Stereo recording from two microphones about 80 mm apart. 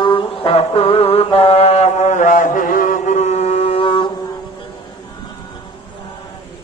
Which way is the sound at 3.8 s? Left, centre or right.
Left.